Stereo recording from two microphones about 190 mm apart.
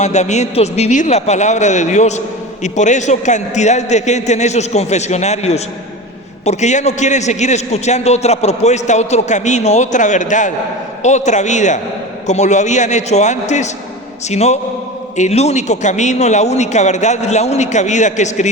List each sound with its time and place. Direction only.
0.0 s a man's voice: 35° left (ahead or behind)